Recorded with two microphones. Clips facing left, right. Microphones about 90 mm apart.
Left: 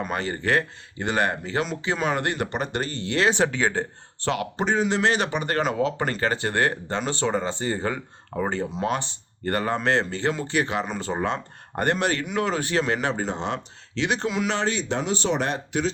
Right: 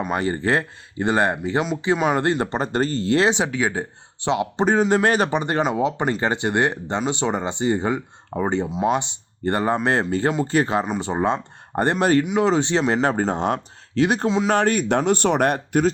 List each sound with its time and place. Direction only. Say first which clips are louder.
0.1 s speech: right 3 dB; 25° right (ahead or behind)
3.3 s speech: even; 10° right (ahead or behind)
4.6 s speech: right 4 dB; 45° right (ahead or behind)
5.4 s speech: right 3 dB; 20° right (ahead or behind)
12.2 s speech: right 5 dB; 15° right (ahead or behind)
12.5 s speech: right 5 dB; 25° right (ahead or behind)
13.1 s speech: right 6 dB; 45° right (ahead or behind)
14.3 s speech: right 5 dB; 25° right (ahead or behind)
14.5 s speech: right 7 dB; 50° right (ahead or behind)